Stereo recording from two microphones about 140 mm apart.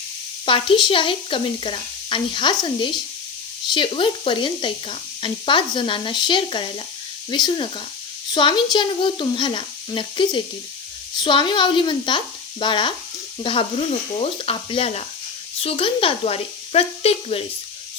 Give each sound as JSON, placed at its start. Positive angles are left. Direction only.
{"t": 0.4, "sound": "speech", "side_deg": 40}